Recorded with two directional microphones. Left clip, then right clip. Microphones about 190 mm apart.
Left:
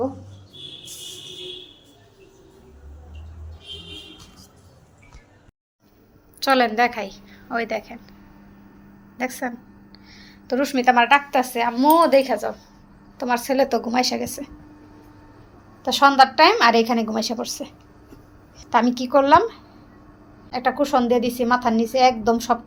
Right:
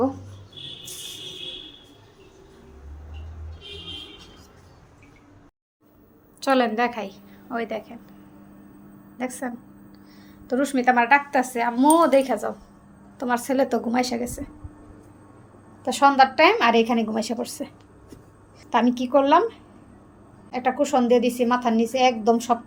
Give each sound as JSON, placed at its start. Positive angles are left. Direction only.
{"t": 6.4, "sound": "a woman's voice", "side_deg": -15}
{"t": 9.1, "sound": "a woman's voice", "side_deg": -10}
{"t": 15.8, "sound": "a woman's voice", "side_deg": -10}
{"t": 18.7, "sound": "a woman's voice", "side_deg": -10}